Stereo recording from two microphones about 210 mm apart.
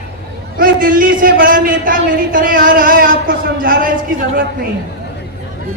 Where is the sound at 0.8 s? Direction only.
40° right (ahead or behind).